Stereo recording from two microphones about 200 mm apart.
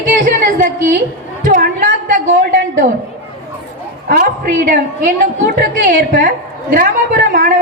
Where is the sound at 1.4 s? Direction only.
40° right (ahead or behind).